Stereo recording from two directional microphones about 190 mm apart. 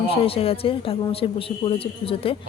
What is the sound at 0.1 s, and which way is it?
Speech, 30° left (ahead or behind).